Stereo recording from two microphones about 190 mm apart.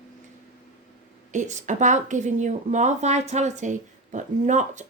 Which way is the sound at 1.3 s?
40° right (ahead or behind).